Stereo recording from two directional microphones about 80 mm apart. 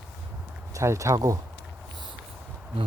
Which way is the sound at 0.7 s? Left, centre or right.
Right.